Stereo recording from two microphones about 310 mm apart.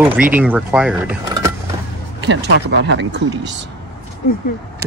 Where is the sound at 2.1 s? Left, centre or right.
Right.